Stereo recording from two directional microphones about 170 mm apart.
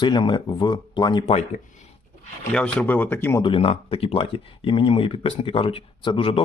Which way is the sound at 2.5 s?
5° left (ahead or behind).